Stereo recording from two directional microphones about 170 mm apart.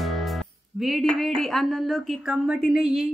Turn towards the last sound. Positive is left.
turn(degrees=-5)  # may be behind; listen again after turning